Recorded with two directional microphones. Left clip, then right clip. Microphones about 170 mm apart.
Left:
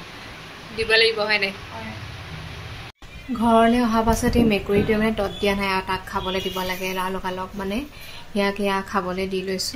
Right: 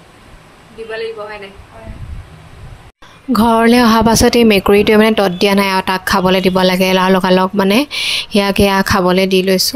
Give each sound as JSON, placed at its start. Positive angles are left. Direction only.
{"t": 0.8, "sound": "speech", "side_deg": 10}
{"t": 3.3, "sound": "a woman's voice", "side_deg": -55}